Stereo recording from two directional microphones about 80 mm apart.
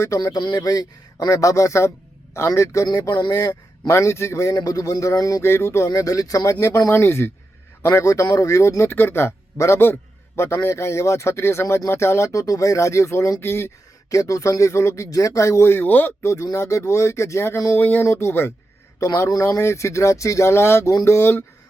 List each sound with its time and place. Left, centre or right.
0.3 s a man's voice: left
2.8 s speech: left
4.5 s speech: left
5.4 s a man's voice: left
5.9 s a man's voice: left
14.1 s a man's voice: left
16.2 s a man's voice: left
17.7 s a man's voice: left